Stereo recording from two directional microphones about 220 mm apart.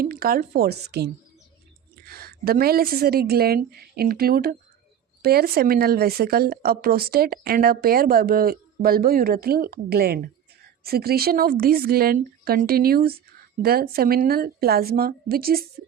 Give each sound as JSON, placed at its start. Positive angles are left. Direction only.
{"t": 0.0, "sound": "a woman's voice", "side_deg": -40}